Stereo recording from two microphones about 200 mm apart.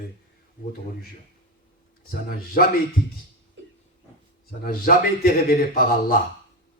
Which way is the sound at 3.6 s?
60° right (ahead or behind).